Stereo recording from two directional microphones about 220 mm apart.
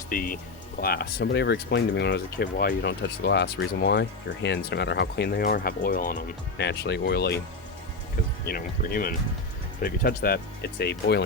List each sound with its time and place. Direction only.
0.1 s speech: 40° left (ahead or behind)
8.4 s speech: 40° left (ahead or behind)